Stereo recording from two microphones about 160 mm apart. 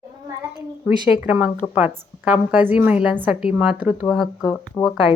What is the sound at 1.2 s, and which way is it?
A woman's voice, 10° right (ahead or behind).